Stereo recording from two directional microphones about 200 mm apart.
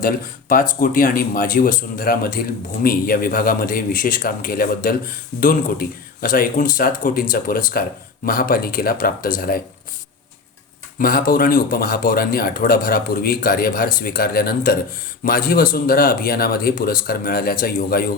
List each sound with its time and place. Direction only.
0.0 s speech: 45° left (ahead or behind)
10.9 s speech: 45° left (ahead or behind)